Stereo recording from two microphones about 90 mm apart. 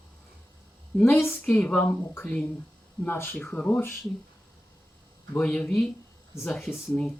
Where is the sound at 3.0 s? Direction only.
20° left (ahead or behind).